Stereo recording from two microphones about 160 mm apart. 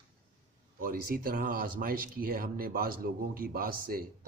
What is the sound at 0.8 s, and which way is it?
Speech, 65° right (ahead or behind).